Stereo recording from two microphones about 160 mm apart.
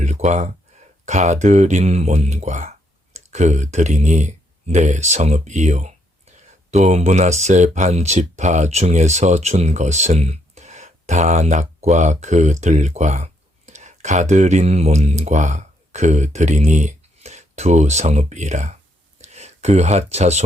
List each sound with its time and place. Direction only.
0.0 s speech: 45° right (ahead or behind)